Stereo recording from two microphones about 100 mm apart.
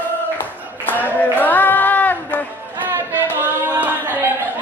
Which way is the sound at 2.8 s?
20° right (ahead or behind).